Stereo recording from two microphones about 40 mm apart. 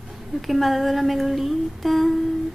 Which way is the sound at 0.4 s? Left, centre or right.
Centre.